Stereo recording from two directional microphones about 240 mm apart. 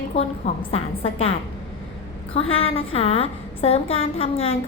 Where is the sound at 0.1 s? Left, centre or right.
Left.